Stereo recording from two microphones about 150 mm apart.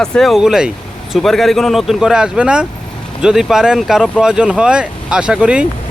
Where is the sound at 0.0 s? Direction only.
5° left (ahead or behind).